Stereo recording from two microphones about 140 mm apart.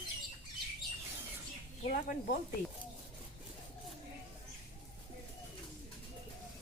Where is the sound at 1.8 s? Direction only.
75° left (ahead or behind).